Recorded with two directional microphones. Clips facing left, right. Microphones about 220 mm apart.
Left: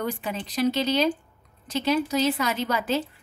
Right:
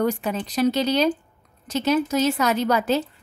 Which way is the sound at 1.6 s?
45° right (ahead or behind).